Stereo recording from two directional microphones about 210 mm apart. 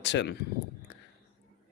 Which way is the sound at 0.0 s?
55° left (ahead or behind).